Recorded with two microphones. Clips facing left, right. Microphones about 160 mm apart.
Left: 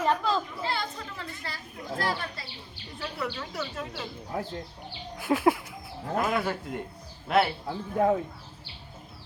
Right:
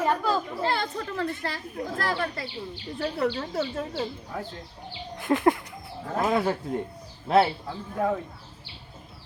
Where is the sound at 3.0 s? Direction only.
40° right (ahead or behind).